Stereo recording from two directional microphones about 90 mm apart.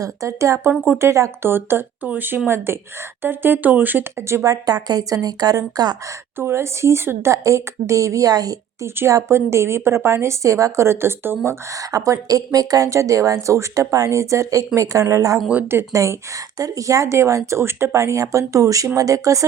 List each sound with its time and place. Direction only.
0.0 s a woman's voice: 35° right (ahead or behind)
4.4 s a woman's voice: 45° right (ahead or behind)
6.4 s speech: 30° right (ahead or behind)
9.0 s a woman's voice: 30° right (ahead or behind)
11.9 s speech: 40° right (ahead or behind)